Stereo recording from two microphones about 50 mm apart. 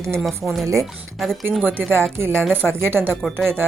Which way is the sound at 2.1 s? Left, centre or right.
Right.